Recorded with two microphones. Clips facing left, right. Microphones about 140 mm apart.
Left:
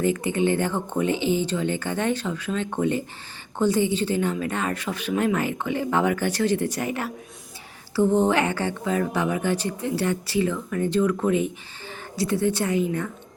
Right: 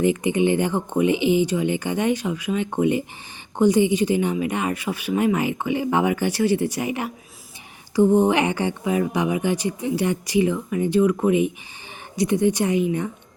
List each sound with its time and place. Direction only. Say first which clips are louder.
0.0 s a woman's voice: right 3 dB; 15° right (ahead or behind)